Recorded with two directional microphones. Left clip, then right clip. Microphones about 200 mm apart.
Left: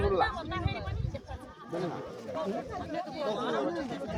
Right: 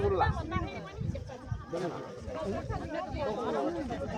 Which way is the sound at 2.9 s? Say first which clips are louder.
Left 1 dB; 60° left (ahead or behind).